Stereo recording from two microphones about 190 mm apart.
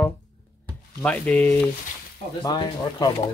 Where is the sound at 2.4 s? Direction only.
20° left (ahead or behind).